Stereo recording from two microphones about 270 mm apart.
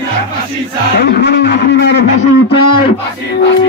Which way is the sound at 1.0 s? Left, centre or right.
Left.